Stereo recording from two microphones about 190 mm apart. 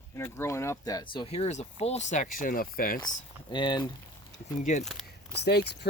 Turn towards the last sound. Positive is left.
turn(degrees=60)  # may be behind; listen again after turning